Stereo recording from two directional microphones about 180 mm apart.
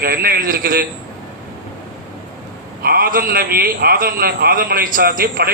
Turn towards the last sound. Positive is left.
turn(degrees=-55)  # may be behind; listen again after turning